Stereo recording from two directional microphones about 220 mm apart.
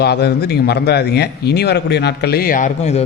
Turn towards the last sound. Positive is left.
turn(degrees=30)  # may be behind; listen again after turning